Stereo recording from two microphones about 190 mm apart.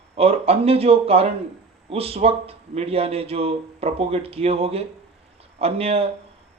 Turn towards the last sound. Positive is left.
turn(degrees=-30)  # may be behind; listen again after turning